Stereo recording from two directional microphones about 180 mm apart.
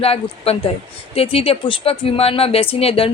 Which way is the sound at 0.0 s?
35° left (ahead or behind).